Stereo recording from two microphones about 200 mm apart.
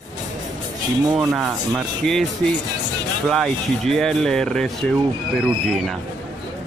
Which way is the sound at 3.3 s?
Centre (ahead or behind).